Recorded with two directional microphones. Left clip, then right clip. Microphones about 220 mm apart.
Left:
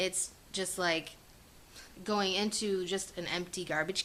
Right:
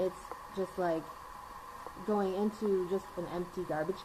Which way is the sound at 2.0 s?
35° left (ahead or behind).